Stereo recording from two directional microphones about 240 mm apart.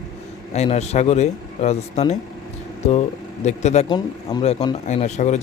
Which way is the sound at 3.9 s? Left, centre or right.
Centre.